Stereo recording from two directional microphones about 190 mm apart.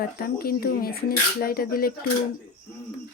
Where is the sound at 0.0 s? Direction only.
50° left (ahead or behind).